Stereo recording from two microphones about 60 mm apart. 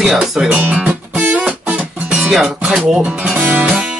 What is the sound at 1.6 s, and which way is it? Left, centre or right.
Music, right.